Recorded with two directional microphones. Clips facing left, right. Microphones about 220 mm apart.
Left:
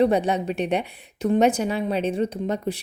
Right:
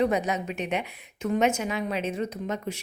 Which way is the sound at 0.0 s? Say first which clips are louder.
Left 5 dB; 30° left (ahead or behind).